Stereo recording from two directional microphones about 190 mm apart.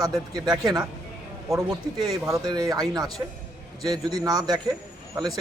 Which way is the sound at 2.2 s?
20° right (ahead or behind).